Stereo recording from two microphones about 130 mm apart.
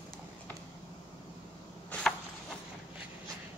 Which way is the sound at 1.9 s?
5° left (ahead or behind).